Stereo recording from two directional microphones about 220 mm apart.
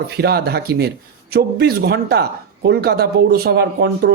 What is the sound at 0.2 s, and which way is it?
Speech, 45° right (ahead or behind).